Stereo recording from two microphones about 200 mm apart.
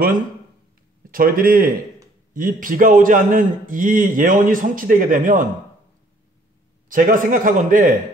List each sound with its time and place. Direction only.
1.1 s a man's voice: 45° right (ahead or behind)
6.9 s a man's voice: 45° right (ahead or behind)